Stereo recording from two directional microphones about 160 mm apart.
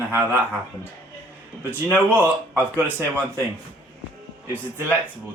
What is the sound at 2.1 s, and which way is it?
Speech, 10° right (ahead or behind).